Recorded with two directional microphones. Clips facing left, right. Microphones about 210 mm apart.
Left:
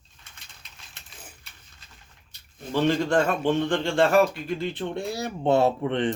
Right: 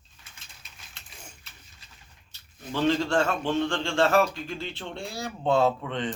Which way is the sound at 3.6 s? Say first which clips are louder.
Left 3 dB; 15° left (ahead or behind).